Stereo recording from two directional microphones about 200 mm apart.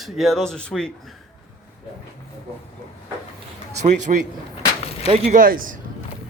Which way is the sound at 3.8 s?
35° right (ahead or behind).